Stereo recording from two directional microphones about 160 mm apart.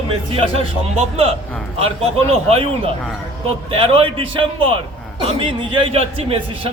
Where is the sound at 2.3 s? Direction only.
40° right (ahead or behind).